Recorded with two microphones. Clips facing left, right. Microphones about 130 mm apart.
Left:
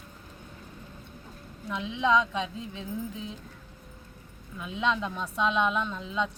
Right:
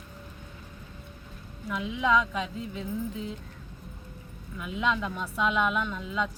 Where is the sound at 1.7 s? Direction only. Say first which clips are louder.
Even; 25° left (ahead or behind).